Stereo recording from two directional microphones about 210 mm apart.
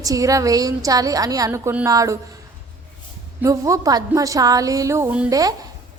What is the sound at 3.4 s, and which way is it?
A woman's voice, 15° right (ahead or behind).